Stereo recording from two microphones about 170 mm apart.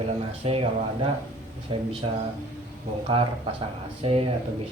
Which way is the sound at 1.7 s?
30° right (ahead or behind).